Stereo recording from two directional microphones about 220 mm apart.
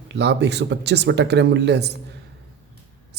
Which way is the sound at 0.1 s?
50° right (ahead or behind).